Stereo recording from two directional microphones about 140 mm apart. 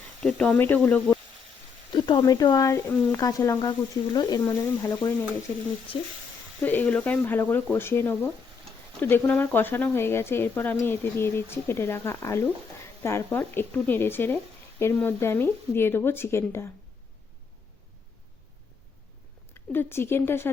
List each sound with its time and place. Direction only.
0.2 s speech: 5° left (ahead or behind)
1.9 s speech: 35° left (ahead or behind)
6.6 s speech: 10° left (ahead or behind)
19.7 s speech: 15° left (ahead or behind)